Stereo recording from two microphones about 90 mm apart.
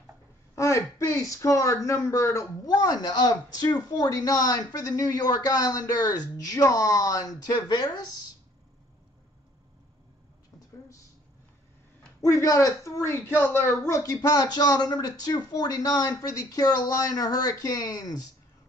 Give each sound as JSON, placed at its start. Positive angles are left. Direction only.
{"t": 0.6, "sound": "speech", "side_deg": 35}
{"t": 12.2, "sound": "speech", "side_deg": 40}
{"t": 14.2, "sound": "speech", "side_deg": 50}